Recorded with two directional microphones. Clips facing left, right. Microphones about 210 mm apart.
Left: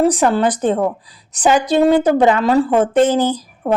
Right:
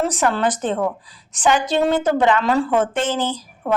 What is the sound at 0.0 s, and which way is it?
A woman's voice, 35° left (ahead or behind).